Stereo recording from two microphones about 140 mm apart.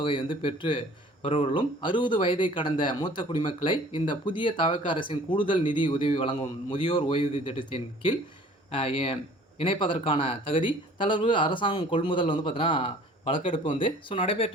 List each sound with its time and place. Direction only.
0.0 s speech: 40° left (ahead or behind)